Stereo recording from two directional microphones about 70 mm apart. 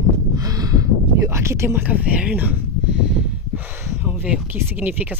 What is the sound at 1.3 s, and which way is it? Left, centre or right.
Speech, right.